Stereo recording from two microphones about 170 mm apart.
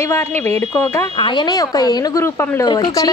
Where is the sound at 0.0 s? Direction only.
15° left (ahead or behind).